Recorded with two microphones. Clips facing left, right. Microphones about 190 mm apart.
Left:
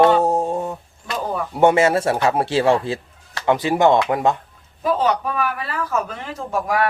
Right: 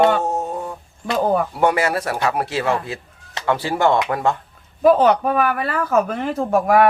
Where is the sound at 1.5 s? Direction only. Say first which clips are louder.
Left 4 dB; 25° left (ahead or behind).